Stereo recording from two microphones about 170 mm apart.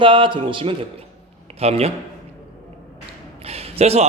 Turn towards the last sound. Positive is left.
turn(degrees=-40)  # may be behind; listen again after turning